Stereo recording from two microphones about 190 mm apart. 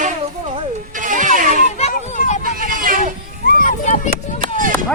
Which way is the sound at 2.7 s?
45° right (ahead or behind).